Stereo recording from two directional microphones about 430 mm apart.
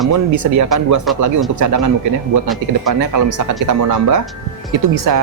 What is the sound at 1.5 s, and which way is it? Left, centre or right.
Speech, right.